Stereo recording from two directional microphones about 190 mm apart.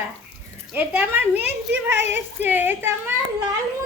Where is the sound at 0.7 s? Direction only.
10° right (ahead or behind).